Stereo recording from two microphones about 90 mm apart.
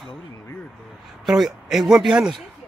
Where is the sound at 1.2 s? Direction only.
5° right (ahead or behind).